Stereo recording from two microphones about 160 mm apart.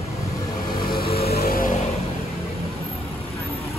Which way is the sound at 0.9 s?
70° left (ahead or behind).